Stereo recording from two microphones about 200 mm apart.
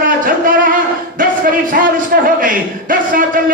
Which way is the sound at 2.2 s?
45° right (ahead or behind).